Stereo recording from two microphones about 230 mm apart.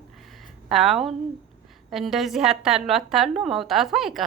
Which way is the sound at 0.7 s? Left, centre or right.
Centre.